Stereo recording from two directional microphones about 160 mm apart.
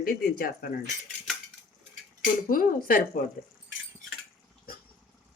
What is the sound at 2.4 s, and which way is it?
Speech, 60° left (ahead or behind).